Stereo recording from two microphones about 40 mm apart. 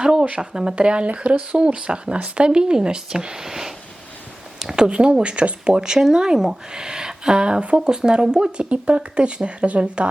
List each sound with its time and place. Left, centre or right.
0.0 s speech: centre
4.7 s speech: right
8.7 s speech: right